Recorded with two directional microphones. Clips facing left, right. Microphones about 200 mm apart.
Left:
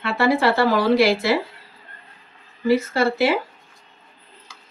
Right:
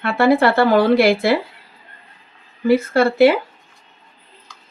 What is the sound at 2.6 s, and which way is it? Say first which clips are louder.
Speech: right 4 dB; 55° right (ahead or behind).